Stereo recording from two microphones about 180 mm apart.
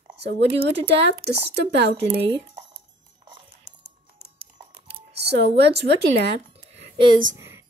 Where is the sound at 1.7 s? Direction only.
70° right (ahead or behind).